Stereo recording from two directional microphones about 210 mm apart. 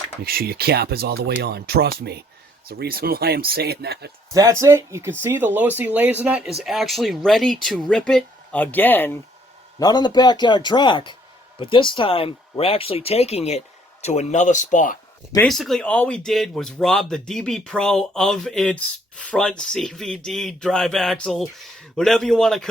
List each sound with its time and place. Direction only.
0.3 s speech: 45° right (ahead or behind)
4.4 s speech: 15° right (ahead or behind); by 14.9 s 35° left (ahead or behind)
15.4 s speech: centre (ahead or behind)